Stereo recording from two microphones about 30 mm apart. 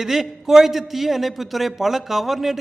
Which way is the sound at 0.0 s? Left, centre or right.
Centre.